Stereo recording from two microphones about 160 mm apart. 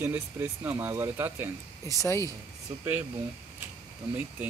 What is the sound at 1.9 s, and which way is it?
Speech, 20° left (ahead or behind).